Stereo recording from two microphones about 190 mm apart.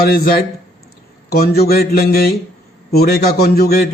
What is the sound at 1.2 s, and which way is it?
A man's voice, 55° left (ahead or behind).